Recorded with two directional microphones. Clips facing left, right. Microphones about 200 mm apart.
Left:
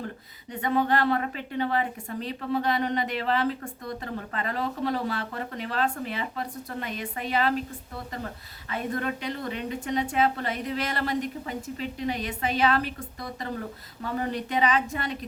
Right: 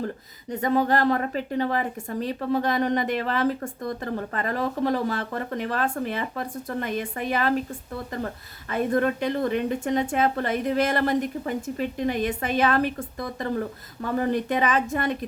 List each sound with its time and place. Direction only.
0.5 s a woman's voice: 40° right (ahead or behind)
8.7 s a woman's voice: 45° right (ahead or behind)